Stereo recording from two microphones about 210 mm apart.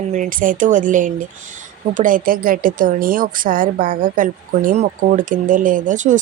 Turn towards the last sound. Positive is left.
turn(degrees=-35)  # may be behind; listen again after turning